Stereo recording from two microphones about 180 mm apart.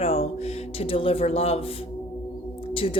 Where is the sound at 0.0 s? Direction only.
35° left (ahead or behind).